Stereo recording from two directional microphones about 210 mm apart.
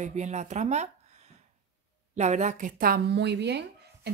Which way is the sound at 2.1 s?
35° right (ahead or behind).